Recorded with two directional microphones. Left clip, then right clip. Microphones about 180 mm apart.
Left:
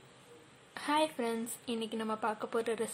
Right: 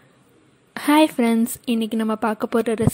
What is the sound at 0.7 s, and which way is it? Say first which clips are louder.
A woman's voice: right 15 dB; 50° right (ahead or behind).